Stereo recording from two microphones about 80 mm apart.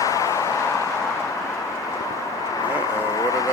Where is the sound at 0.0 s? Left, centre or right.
Left.